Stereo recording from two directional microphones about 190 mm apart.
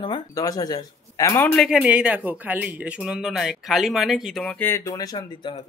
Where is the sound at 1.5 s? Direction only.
5° right (ahead or behind); by 5.6 s 25° left (ahead or behind).